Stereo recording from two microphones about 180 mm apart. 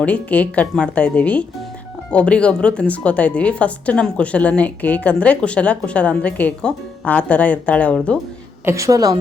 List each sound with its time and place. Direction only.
0.0 s speech: 10° left (ahead or behind)
8.6 s a woman's voice: 15° right (ahead or behind)